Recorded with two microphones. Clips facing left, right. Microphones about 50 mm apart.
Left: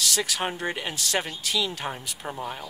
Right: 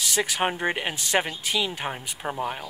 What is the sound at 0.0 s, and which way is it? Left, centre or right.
Speech, right.